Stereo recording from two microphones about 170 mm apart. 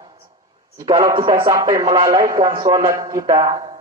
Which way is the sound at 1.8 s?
30° right (ahead or behind).